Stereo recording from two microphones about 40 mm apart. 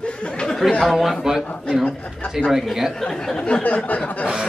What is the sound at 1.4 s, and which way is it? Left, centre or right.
Speech, left.